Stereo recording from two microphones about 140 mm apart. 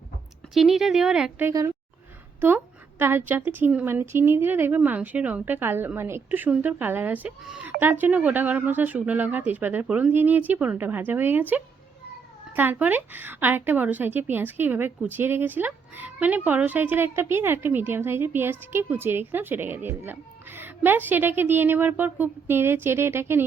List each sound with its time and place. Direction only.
0.5 s speech: centre (ahead or behind)
1.5 s a woman's voice: 20° right (ahead or behind)
3.0 s a woman's voice: 15° right (ahead or behind)